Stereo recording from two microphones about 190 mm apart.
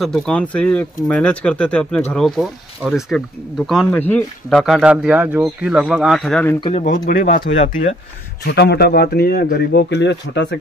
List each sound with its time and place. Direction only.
0.0 s speech: 5° left (ahead or behind)
6.6 s speech: 35° left (ahead or behind)
8.5 s speech: 60° left (ahead or behind)